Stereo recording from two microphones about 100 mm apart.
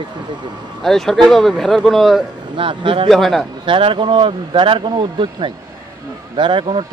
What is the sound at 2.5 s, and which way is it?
Speech, 60° right (ahead or behind).